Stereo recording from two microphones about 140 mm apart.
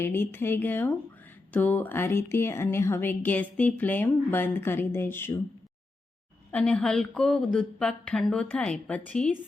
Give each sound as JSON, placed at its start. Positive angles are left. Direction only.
{"t": 0.0, "sound": "a woman's voice", "side_deg": 15}
{"t": 6.5, "sound": "a woman's voice", "side_deg": 10}